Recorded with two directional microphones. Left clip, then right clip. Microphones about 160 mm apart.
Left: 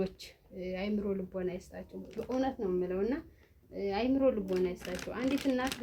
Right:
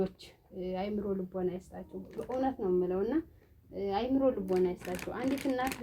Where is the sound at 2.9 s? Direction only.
35° right (ahead or behind).